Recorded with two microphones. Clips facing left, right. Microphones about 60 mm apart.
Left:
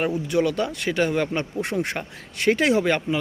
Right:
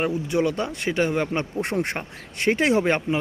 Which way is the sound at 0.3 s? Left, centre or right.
Right.